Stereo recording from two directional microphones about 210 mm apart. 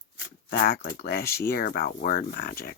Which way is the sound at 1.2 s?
10° left (ahead or behind).